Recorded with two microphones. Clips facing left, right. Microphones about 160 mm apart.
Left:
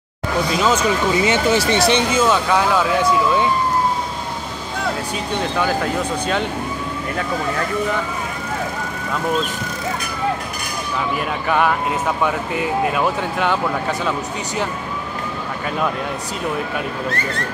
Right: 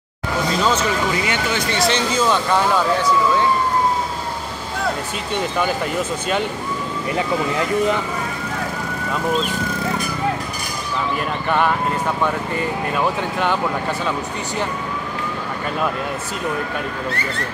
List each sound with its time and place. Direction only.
0.6 s speech: 10° left (ahead or behind)
1.1 s speech: 25° left (ahead or behind)
1.8 s speech: centre (ahead or behind)
11.1 s speech: centre (ahead or behind)